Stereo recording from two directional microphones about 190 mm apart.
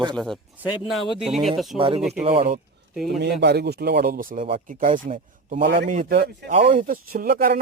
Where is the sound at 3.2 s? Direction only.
60° right (ahead or behind).